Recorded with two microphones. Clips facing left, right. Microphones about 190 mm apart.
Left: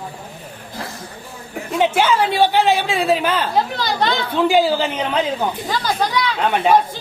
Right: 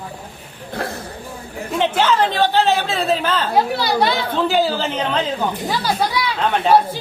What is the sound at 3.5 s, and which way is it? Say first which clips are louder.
Speech: right 2 dB; 10° right (ahead or behind).